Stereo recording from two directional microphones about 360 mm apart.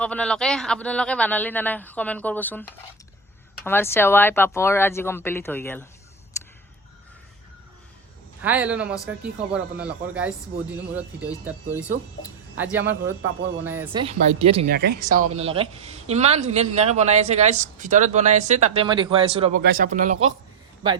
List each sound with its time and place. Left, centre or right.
0.0 s speech: centre
8.4 s speech: centre